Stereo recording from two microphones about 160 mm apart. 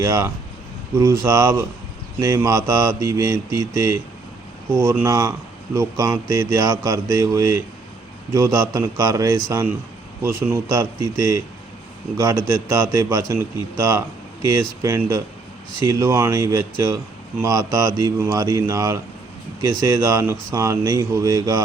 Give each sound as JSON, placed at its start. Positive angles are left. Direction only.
{"t": 0.0, "sound": "a man's voice", "side_deg": -20}